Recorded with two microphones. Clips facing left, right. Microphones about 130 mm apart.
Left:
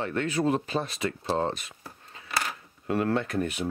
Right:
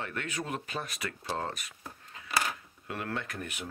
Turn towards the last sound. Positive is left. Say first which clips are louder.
# left 10 dB
turn(degrees=30)  # may be behind; listen again after turning